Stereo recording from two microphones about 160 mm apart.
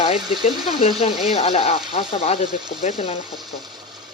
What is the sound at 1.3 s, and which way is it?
Speech, 40° left (ahead or behind).